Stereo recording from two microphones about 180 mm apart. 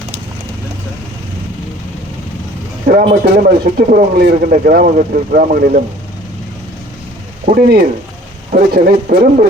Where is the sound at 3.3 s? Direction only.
55° right (ahead or behind).